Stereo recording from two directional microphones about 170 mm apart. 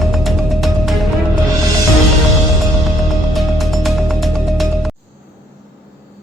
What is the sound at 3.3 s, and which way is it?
Music, centre (ahead or behind).